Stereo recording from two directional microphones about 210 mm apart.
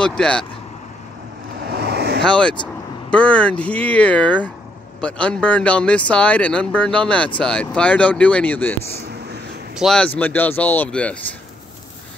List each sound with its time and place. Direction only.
0.0 s speech: 5° left (ahead or behind)
1.7 s vehicle: 50° right (ahead or behind)
2.2 s speech: 5° left (ahead or behind)
9.8 s speech: 5° left (ahead or behind)